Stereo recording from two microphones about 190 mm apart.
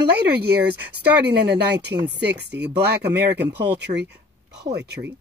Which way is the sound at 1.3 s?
60° right (ahead or behind).